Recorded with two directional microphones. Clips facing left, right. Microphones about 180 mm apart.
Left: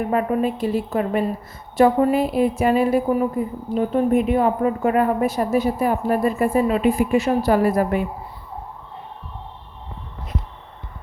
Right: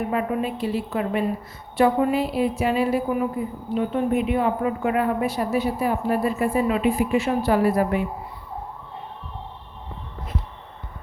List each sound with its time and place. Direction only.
0.1 s a woman's voice: 45° left (ahead or behind)